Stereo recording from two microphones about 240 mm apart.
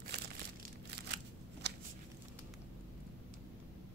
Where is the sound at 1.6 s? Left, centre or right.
Right.